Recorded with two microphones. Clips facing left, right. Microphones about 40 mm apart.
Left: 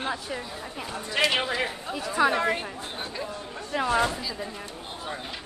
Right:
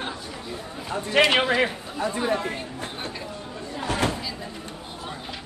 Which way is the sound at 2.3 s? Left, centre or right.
Left.